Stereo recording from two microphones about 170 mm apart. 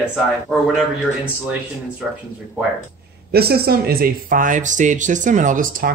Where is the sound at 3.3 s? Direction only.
65° right (ahead or behind).